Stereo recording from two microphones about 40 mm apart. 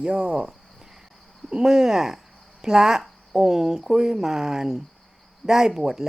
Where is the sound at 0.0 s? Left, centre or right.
Right.